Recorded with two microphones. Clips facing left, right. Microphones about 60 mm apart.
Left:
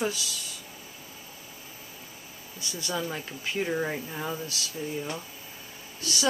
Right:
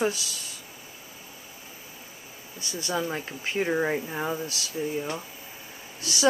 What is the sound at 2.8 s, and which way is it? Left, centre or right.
Speech, centre.